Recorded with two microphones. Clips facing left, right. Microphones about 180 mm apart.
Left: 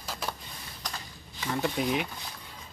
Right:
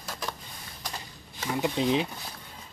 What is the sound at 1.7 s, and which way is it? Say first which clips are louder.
Speech: right 6 dB; 25° right (ahead or behind).